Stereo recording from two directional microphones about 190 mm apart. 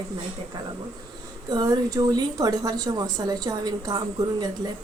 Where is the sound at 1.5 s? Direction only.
20° right (ahead or behind).